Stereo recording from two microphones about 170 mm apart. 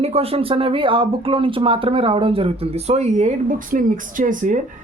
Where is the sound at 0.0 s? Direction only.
35° right (ahead or behind).